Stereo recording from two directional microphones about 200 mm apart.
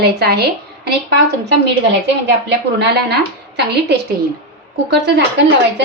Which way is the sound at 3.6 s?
55° right (ahead or behind).